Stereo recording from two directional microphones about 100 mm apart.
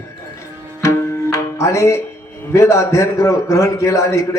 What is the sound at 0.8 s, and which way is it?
Tabla, 30° left (ahead or behind).